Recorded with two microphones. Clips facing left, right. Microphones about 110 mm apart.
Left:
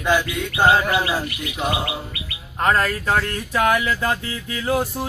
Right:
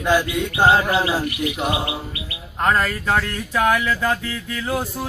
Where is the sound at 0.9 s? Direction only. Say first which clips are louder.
Right 1 dB; 20° right (ahead or behind).